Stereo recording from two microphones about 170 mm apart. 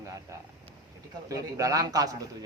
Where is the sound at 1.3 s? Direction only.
20° right (ahead or behind).